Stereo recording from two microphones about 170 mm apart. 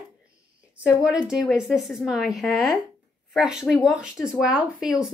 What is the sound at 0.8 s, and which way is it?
A woman's voice, 5° right (ahead or behind).